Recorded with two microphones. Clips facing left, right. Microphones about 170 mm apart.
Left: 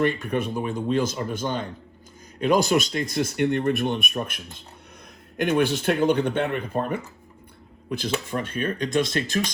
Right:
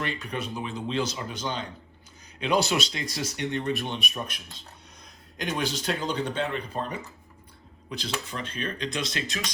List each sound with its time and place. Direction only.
0.0 s speech: 55° left (ahead or behind)
5.4 s speech: 60° left (ahead or behind)